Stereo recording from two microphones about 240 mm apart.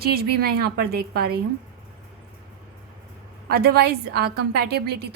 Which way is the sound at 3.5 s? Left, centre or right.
Right.